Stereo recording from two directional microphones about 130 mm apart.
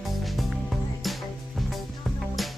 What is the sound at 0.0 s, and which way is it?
Music, centre (ahead or behind).